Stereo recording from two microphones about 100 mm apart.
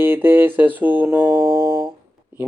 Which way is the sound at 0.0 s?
20° right (ahead or behind).